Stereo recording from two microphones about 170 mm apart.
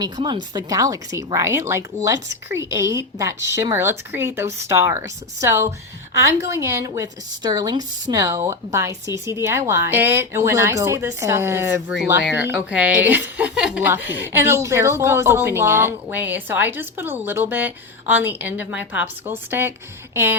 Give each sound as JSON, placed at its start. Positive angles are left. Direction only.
{"t": 0.0, "sound": "speech", "side_deg": -25}